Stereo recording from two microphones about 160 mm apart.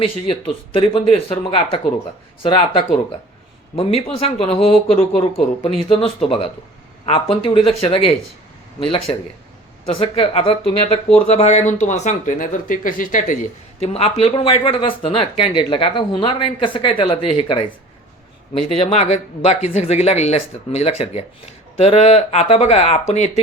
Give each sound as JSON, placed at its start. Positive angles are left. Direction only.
{"t": 0.0, "sound": "speech", "side_deg": 35}
{"t": 9.8, "sound": "speech", "side_deg": 35}
{"t": 18.7, "sound": "speech", "side_deg": 40}